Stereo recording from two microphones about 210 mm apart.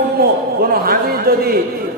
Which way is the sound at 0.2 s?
45° right (ahead or behind).